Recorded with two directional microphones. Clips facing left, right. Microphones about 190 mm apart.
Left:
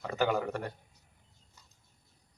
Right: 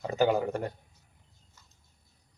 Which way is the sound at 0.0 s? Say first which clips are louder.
Right 4 dB; 25° right (ahead or behind).